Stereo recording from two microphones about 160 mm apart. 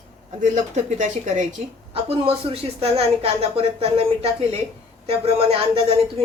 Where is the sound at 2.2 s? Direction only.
35° right (ahead or behind).